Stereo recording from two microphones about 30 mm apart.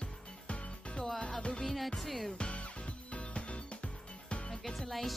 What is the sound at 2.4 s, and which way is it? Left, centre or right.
Music, left.